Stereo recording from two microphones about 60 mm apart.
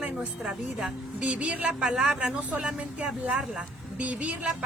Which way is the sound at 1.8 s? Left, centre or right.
Centre.